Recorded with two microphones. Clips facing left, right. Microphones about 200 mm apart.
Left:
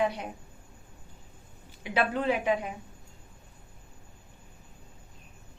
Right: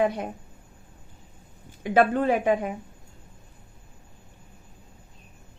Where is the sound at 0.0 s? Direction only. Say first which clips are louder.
Right 4 dB; 50° right (ahead or behind).